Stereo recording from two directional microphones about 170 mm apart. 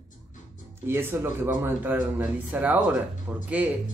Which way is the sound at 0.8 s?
15° right (ahead or behind).